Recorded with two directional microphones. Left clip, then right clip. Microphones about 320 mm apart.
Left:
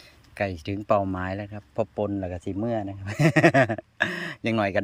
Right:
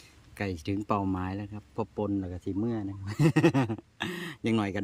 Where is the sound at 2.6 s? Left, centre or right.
Centre.